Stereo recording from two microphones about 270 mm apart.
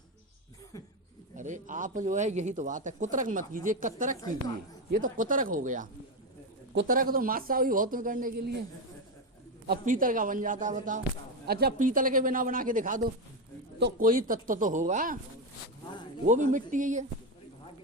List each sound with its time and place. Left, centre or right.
1.4 s a man's voice: right
9.6 s a man's voice: right
16.2 s speech: right